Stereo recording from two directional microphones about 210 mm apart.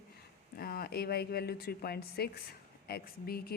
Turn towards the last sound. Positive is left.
turn(degrees=45)  # may be behind; listen again after turning